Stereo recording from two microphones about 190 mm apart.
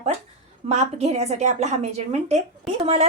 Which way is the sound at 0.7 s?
35° right (ahead or behind).